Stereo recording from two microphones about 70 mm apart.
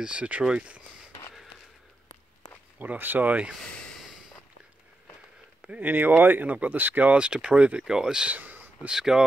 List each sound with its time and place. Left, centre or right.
0.0 s speech: centre
2.8 s speech: right
5.6 s speech: right
8.4 s a sound: right
8.8 s speech: centre